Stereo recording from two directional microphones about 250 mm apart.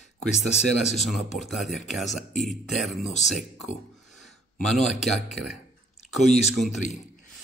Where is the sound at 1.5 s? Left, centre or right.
Centre.